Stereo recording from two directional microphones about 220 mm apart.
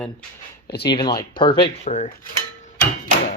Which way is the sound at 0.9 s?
20° left (ahead or behind).